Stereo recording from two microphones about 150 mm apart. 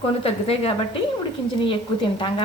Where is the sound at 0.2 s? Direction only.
40° left (ahead or behind).